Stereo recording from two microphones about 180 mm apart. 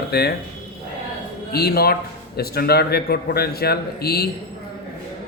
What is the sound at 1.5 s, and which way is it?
A man's voice, 60° left (ahead or behind).